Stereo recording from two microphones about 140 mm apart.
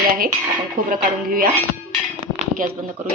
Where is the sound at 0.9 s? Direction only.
90° right.